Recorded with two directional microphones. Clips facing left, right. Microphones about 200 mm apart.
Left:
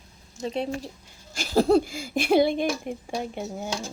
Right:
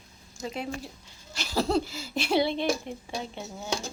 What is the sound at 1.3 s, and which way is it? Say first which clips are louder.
Speech: left 7 dB; 50° left (ahead or behind).